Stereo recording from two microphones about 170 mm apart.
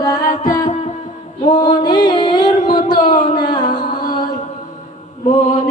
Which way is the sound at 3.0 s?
50° left (ahead or behind).